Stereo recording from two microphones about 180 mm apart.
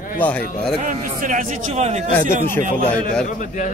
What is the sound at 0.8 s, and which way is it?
A man's voice, 45° right (ahead or behind).